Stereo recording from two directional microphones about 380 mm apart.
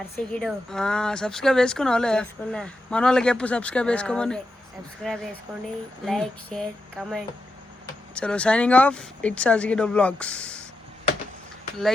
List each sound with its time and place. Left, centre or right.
0.2 s speech: centre